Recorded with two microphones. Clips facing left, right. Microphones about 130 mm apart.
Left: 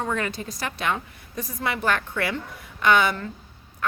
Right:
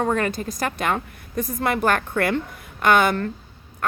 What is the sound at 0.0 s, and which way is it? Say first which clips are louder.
A woman's voice: right 5 dB; 45° right (ahead or behind).